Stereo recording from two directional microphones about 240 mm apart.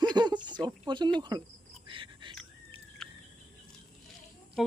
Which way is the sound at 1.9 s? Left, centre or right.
Right.